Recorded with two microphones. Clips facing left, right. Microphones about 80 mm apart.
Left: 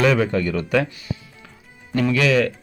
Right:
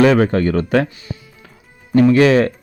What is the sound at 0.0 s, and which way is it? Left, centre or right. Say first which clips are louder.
A man's voice: right 6 dB; right.